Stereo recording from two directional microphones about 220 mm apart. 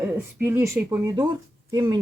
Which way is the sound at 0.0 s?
10° right (ahead or behind).